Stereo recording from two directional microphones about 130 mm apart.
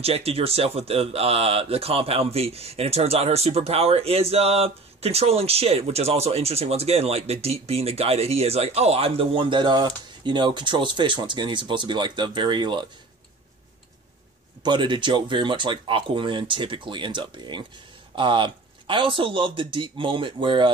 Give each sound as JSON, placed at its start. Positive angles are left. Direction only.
{"t": 0.0, "sound": "speech", "side_deg": -50}
{"t": 14.6, "sound": "speech", "side_deg": -35}